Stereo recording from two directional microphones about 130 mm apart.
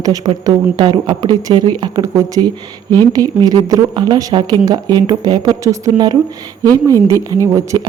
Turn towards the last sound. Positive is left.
turn(degrees=-25)  # may be behind; listen again after turning